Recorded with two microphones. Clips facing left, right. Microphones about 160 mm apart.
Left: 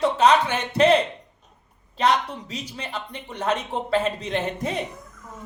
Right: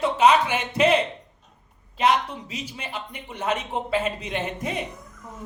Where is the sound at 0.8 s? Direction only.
10° right (ahead or behind).